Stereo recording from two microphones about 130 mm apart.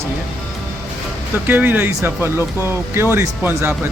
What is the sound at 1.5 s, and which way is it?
Speech, 15° right (ahead or behind).